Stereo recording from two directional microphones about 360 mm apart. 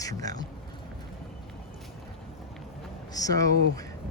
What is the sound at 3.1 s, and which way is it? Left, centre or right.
Speech, centre.